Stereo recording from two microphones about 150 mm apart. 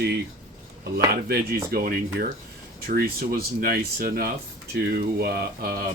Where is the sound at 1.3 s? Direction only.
90° right.